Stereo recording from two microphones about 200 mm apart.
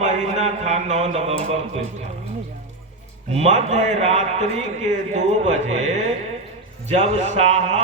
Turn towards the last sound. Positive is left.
turn(degrees=-35)  # may be behind; listen again after turning